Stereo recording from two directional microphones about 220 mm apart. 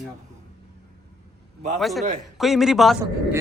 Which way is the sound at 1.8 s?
Centre (ahead or behind).